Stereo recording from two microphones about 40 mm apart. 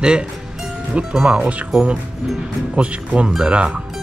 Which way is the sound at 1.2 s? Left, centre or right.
Right.